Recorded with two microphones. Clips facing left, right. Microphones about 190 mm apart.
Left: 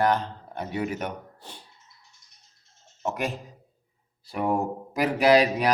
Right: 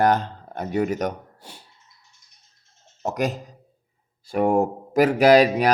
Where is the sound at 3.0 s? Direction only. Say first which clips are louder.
Right 5 dB; 40° right (ahead or behind).